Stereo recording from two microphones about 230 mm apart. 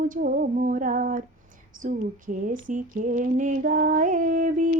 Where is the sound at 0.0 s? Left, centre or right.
Right.